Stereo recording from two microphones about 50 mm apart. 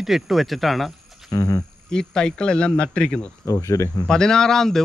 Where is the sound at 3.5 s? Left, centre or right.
Left.